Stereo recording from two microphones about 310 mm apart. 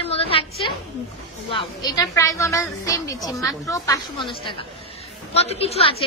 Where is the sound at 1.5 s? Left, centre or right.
Centre.